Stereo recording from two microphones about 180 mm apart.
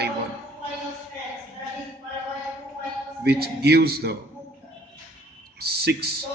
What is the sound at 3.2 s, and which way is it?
Speech, 60° right (ahead or behind).